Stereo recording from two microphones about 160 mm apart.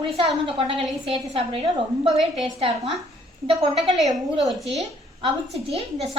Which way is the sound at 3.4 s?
30° right (ahead or behind).